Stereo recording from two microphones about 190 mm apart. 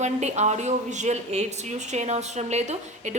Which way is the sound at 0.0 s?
35° right (ahead or behind).